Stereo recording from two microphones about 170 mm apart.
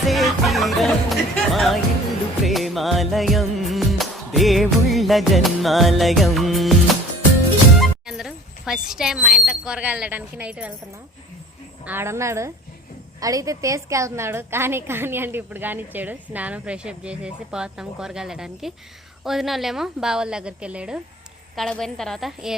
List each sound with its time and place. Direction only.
0.0 s music: centre (ahead or behind)
2.4 s music of bollywood: centre (ahead or behind)
7.8 s speech: centre (ahead or behind)
11.9 s a woman's voice: 15° right (ahead or behind)